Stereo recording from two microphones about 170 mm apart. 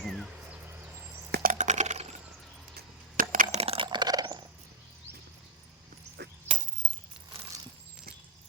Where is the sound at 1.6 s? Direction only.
45° right (ahead or behind).